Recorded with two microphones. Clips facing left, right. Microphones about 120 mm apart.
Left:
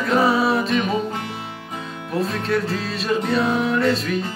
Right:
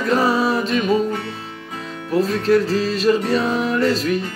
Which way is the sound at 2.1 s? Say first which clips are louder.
Right 6 dB; centre (ahead or behind).